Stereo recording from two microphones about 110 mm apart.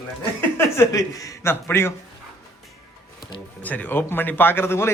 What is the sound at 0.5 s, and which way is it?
A man's voice, 25° left (ahead or behind).